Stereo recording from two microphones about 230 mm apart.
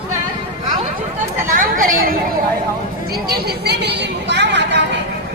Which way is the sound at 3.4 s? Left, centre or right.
Right.